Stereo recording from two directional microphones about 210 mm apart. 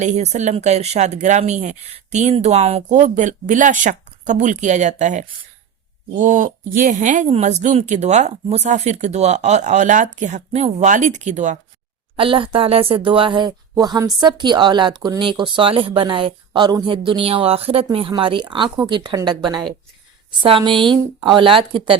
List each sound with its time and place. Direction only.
0.0 s speech: 35° right (ahead or behind)
20.8 s speech: centre (ahead or behind)
21.3 s speech: 25° right (ahead or behind)